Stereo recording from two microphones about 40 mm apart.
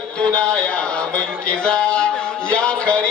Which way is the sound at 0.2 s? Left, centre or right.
Left.